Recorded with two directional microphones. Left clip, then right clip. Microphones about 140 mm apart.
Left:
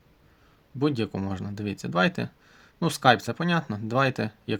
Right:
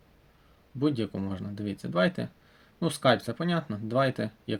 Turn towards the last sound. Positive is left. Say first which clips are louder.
# left 3 dB
turn(degrees=50)  # may be behind; listen again after turning